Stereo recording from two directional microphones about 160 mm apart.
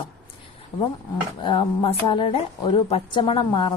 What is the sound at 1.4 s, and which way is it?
A woman's voice, 30° left (ahead or behind).